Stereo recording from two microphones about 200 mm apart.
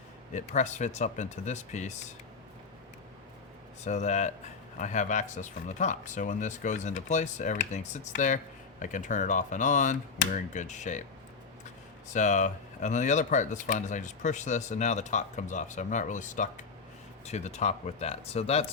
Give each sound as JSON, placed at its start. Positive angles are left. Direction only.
{"t": 0.3, "sound": "speech", "side_deg": 35}
{"t": 3.8, "sound": "speech", "side_deg": 35}
{"t": 12.0, "sound": "speech", "side_deg": 40}